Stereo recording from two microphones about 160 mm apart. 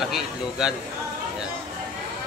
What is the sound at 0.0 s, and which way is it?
Speech, 5° right (ahead or behind).